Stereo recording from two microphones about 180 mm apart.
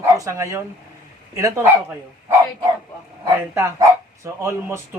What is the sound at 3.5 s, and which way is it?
Speech, 15° right (ahead or behind).